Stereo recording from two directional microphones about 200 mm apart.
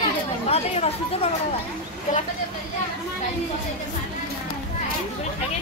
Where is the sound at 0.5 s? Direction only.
30° left (ahead or behind).